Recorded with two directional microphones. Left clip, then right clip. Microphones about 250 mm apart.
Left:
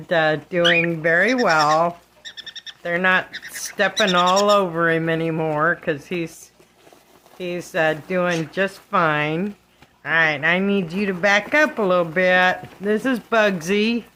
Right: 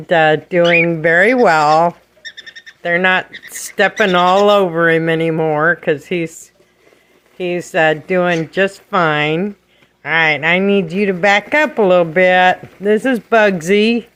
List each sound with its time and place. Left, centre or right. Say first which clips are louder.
0.1 s speech: right 7 dB; centre
7.3 s speech: right 7 dB; right